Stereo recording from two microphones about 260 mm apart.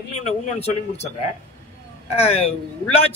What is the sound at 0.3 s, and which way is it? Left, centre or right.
Speech, left.